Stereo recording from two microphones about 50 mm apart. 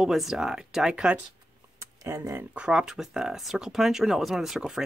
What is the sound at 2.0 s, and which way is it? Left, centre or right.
Speech, right.